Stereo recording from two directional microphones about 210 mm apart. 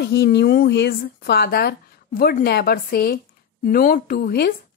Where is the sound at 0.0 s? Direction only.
50° left (ahead or behind).